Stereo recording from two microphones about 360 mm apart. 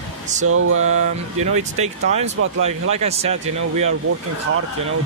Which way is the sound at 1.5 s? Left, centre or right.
Centre.